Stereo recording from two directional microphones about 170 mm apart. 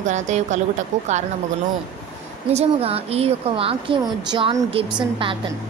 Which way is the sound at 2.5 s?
35° right (ahead or behind).